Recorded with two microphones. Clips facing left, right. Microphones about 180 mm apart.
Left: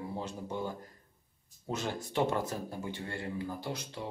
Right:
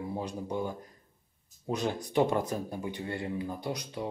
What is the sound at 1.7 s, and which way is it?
Speech, 15° right (ahead or behind).